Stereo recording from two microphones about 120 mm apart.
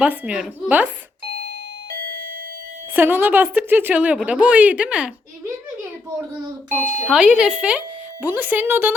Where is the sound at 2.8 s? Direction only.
15° right (ahead or behind).